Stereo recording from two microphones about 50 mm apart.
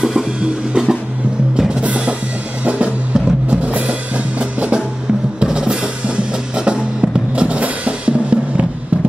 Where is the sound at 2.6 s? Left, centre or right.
Right.